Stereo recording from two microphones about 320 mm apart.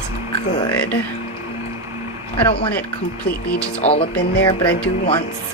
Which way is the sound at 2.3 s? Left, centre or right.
Centre.